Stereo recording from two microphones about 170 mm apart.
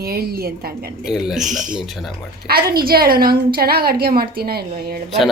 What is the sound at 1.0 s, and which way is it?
Speech, centre (ahead or behind).